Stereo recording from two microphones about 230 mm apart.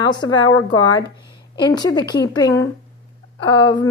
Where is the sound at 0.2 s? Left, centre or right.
Centre.